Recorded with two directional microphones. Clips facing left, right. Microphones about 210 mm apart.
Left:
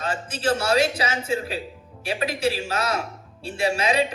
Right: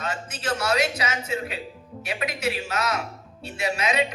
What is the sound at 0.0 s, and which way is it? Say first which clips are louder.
A man's voice: left 5 dB; 30° left (ahead or behind).